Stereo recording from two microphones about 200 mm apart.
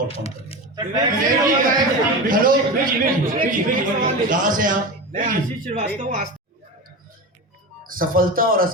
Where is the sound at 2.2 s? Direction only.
45° right (ahead or behind).